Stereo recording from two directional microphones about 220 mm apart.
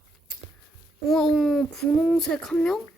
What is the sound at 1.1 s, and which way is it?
A child's voice, centre (ahead or behind).